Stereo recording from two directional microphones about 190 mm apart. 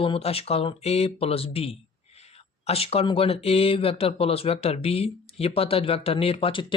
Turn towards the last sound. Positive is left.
turn(degrees=30)  # may be behind; listen again after turning